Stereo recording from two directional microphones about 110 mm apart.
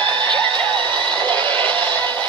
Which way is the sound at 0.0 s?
45° right (ahead or behind).